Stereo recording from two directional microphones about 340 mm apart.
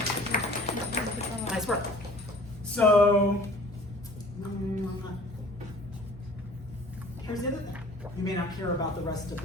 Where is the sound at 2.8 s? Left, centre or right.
Centre.